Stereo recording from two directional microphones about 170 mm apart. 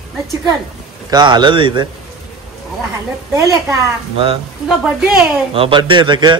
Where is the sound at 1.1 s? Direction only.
25° right (ahead or behind).